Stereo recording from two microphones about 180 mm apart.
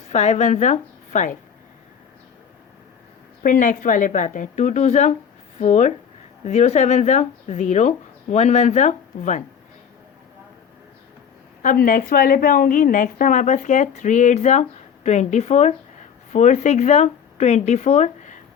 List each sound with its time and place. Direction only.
0.1 s a woman's voice: 40° left (ahead or behind)
3.4 s a woman's voice: 45° left (ahead or behind)
11.6 s a woman's voice: 50° left (ahead or behind)